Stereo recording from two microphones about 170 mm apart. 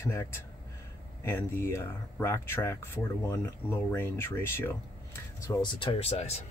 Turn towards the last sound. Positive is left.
turn(degrees=40)  # may be behind; listen again after turning